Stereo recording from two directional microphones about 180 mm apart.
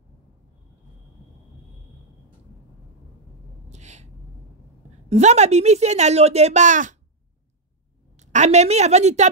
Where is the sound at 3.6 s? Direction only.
40° right (ahead or behind).